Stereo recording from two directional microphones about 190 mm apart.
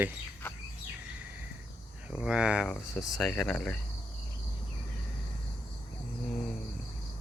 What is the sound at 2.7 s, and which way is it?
Speech, 15° left (ahead or behind).